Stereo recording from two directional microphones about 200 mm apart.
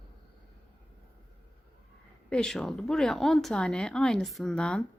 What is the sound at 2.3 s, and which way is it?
Speech, 5° left (ahead or behind).